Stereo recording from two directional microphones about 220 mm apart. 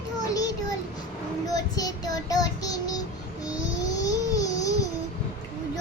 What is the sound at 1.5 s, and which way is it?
Child singing, 15° left (ahead or behind).